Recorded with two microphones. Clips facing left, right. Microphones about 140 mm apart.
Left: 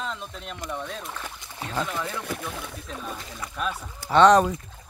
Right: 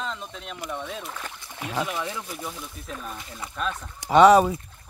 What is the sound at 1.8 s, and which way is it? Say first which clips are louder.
Speech: right 1 dB; 15° right (ahead or behind).